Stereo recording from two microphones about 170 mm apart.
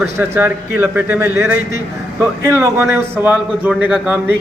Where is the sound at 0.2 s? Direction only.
10° right (ahead or behind).